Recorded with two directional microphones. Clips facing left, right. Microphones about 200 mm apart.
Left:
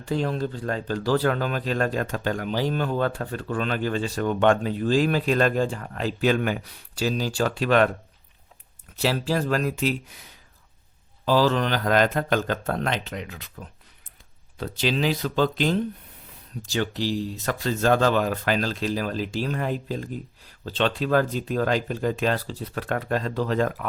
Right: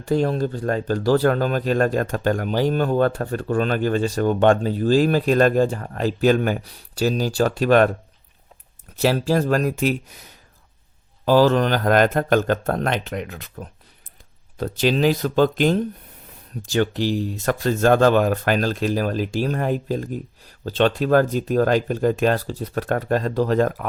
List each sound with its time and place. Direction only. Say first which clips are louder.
0.0 s speech: right 5 dB; 45° right (ahead or behind)
9.0 s speech: right 5 dB; 45° right (ahead or behind)
11.3 s speech: right 5 dB; 50° right (ahead or behind)